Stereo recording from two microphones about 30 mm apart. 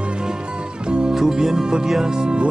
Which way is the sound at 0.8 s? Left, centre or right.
Right.